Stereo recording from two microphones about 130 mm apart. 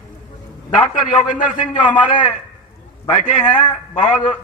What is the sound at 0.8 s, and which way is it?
A man's voice, 70° left (ahead or behind).